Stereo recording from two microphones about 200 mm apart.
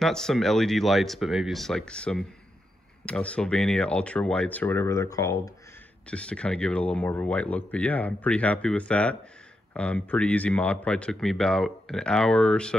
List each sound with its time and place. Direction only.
0.0 s speech: centre (ahead or behind)
6.0 s speech: 5° left (ahead or behind)